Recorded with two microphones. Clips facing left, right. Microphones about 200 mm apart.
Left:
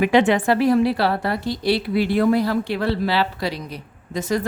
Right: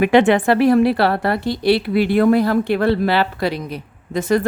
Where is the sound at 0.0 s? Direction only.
60° right (ahead or behind).